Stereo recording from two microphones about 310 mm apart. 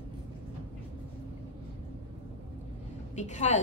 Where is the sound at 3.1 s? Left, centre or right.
Left.